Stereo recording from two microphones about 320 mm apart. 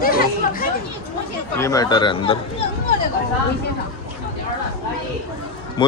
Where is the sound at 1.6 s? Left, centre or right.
Centre.